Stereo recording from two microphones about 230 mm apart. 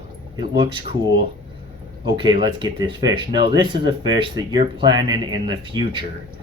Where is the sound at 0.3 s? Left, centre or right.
Right.